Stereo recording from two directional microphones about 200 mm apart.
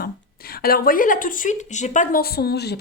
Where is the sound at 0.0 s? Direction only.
50° left (ahead or behind).